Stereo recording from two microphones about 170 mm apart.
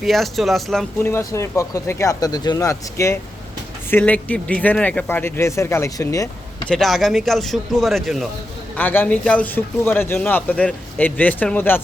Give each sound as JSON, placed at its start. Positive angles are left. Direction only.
{"t": 0.0, "sound": "speech", "side_deg": 0}
{"t": 1.0, "sound": "speech", "side_deg": 15}
{"t": 6.7, "sound": "speech", "side_deg": 0}
{"t": 8.7, "sound": "speech", "side_deg": 10}